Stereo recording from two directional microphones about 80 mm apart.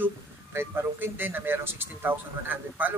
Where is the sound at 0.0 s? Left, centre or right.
Right.